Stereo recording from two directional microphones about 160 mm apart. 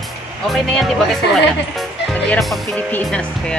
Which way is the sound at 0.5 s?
Centre (ahead or behind).